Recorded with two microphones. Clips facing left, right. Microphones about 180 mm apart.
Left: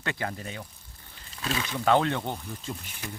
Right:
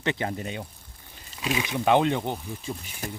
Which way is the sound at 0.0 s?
20° right (ahead or behind).